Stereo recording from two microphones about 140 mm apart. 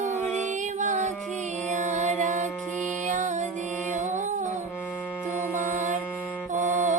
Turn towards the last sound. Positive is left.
turn(degrees=-60)  # may be behind; listen again after turning